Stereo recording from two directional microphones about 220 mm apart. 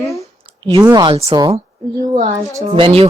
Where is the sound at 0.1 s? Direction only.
15° left (ahead or behind).